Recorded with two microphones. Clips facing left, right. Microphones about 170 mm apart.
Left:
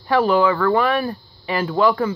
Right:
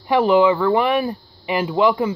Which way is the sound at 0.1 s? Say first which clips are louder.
Right 2 dB; 20° right (ahead or behind).